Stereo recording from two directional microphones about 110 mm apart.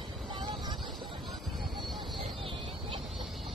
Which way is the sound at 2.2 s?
55° right (ahead or behind).